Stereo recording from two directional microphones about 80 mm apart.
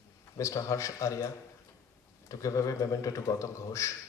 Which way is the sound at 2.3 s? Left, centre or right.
Left.